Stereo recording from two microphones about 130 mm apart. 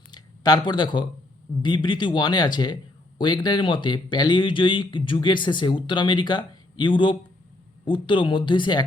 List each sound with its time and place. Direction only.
0.1 s speech: 35° left (ahead or behind)